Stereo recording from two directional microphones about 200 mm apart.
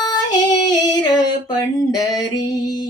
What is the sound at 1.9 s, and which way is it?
Music, 15° left (ahead or behind).